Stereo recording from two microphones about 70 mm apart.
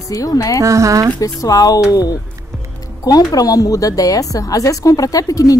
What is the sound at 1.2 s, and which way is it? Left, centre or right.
Speech, left.